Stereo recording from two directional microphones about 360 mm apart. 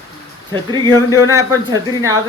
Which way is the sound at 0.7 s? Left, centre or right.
Centre.